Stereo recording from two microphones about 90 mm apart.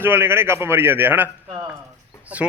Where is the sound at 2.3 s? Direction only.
15° right (ahead or behind).